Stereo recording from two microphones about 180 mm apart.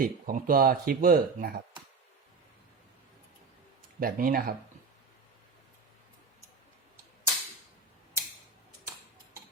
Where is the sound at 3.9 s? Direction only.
50° right (ahead or behind).